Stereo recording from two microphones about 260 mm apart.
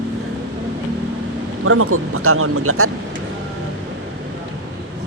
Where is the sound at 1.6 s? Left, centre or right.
Right.